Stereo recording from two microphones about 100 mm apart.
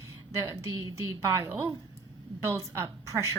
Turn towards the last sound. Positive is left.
turn(degrees=-30)  # may be behind; listen again after turning